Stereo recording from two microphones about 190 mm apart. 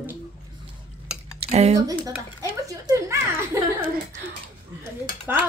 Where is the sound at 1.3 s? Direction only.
35° right (ahead or behind).